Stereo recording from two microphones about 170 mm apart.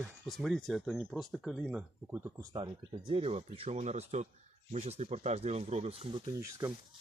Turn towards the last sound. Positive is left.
turn(degrees=-20)  # may be behind; listen again after turning